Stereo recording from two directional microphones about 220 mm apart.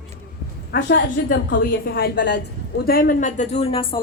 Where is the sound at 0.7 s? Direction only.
50° left (ahead or behind).